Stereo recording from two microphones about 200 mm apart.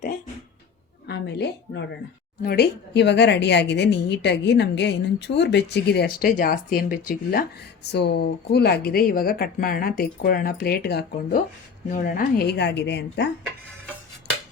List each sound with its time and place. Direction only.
1.0 s a woman's voice: 55° left (ahead or behind)